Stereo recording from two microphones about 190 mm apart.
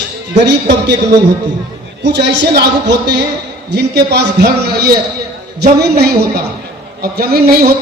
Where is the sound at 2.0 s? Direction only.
65° right (ahead or behind).